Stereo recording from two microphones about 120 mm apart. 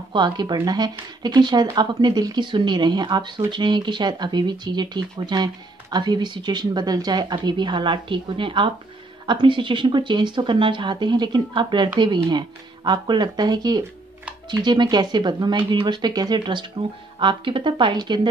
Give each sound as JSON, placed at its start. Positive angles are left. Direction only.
{"t": 0.1, "sound": "a woman's voice", "side_deg": -35}